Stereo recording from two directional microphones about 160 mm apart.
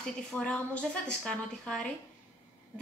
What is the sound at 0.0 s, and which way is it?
A woman's voice, 5° left (ahead or behind).